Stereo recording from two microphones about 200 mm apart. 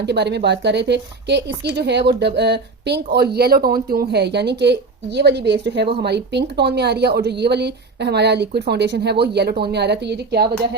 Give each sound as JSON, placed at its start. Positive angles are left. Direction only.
{"t": 0.0, "sound": "a woman's voice", "side_deg": -55}